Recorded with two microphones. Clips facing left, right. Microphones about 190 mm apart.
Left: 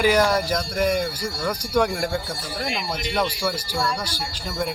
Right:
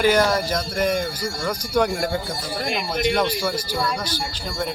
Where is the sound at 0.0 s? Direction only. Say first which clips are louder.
Right 1 dB; 10° left (ahead or behind).